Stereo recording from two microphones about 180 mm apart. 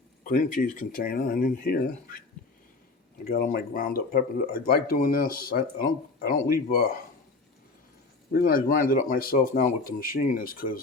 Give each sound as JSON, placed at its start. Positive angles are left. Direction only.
{"t": 0.3, "sound": "speech", "side_deg": 50}
{"t": 3.2, "sound": "speech", "side_deg": 60}
{"t": 8.3, "sound": "speech", "side_deg": 55}